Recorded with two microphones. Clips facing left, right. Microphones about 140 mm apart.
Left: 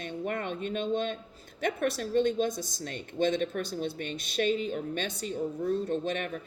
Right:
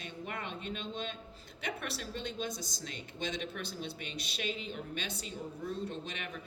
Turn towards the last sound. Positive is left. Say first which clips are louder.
# left 11 dB
turn(degrees=45)  # may be behind; listen again after turning